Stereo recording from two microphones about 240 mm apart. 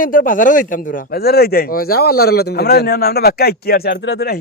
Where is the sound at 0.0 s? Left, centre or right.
Left.